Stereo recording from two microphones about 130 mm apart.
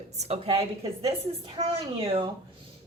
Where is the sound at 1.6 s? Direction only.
45° right (ahead or behind).